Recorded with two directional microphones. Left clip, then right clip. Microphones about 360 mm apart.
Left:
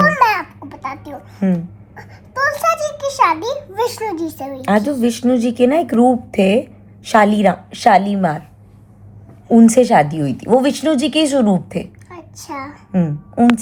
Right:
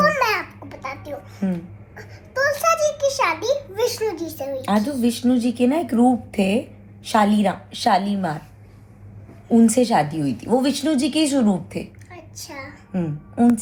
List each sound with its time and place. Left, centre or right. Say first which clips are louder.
0.0 s babbling: left 5 dB; centre
2.0 s a child's voice: left 3 dB; centre
4.6 s speech: left 7 dB; left
9.5 s speech: left 7 dB; left
12.1 s a sound: left 7 dB; centre
12.9 s a woman's voice: left 7 dB; left